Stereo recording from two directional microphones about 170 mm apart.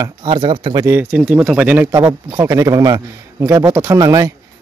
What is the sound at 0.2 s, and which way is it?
Speech, 30° right (ahead or behind).